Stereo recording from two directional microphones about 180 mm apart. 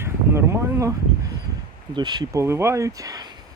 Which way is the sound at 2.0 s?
25° right (ahead or behind).